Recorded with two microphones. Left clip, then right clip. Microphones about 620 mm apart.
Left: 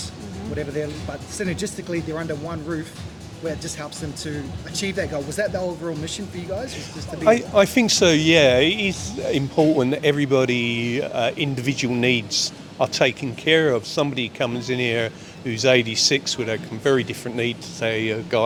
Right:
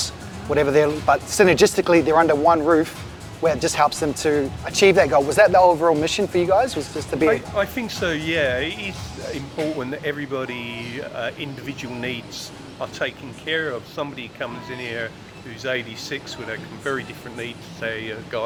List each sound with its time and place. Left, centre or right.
0.5 s speech: right
7.3 s speech: left